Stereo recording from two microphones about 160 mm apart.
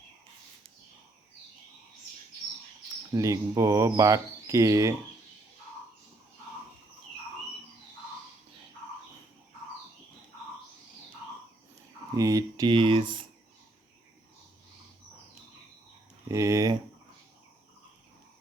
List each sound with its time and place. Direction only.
3.1 s speech: 20° right (ahead or behind)
12.1 s speech: 20° right (ahead or behind)
16.3 s speech: 20° right (ahead or behind)